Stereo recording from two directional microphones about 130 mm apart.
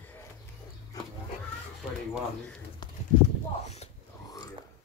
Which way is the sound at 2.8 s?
35° left (ahead or behind).